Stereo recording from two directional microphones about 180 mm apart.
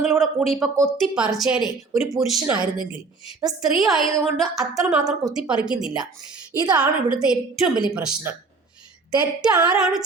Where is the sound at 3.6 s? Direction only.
Centre (ahead or behind).